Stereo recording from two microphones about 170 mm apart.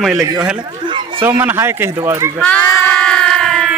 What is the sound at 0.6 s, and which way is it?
Chatter, 30° right (ahead or behind).